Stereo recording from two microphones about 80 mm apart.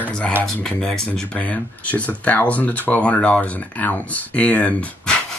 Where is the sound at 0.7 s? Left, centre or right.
Centre.